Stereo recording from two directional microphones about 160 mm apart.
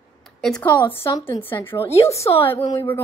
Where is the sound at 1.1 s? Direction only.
30° left (ahead or behind).